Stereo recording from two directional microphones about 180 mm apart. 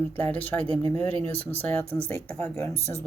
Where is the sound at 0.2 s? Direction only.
10° left (ahead or behind).